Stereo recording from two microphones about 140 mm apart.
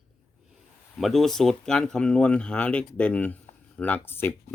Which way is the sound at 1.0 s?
Centre (ahead or behind).